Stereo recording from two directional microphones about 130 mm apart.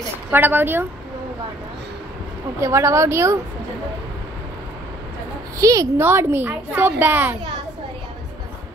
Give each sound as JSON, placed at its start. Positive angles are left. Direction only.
{"t": 0.3, "sound": "a woman's voice", "side_deg": -15}
{"t": 2.6, "sound": "a woman's voice", "side_deg": -20}
{"t": 5.6, "sound": "a woman's voice", "side_deg": -25}